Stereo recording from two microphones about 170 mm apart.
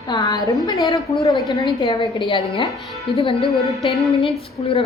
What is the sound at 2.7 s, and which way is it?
Speech, centre (ahead or behind).